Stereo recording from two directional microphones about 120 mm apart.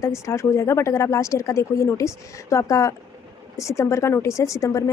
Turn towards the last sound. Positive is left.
turn(degrees=25)  # may be behind; listen again after turning